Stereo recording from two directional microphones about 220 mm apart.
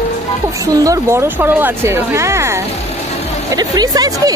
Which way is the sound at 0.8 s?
10° right (ahead or behind).